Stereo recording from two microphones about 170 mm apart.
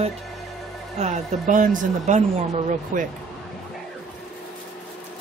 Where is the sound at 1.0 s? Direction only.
45° right (ahead or behind).